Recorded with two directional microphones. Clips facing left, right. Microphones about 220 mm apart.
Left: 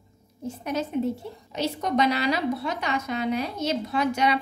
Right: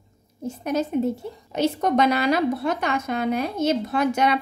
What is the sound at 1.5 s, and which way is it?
A woman's voice, 50° right (ahead or behind).